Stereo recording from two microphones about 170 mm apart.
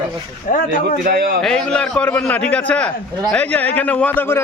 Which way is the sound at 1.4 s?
5° left (ahead or behind).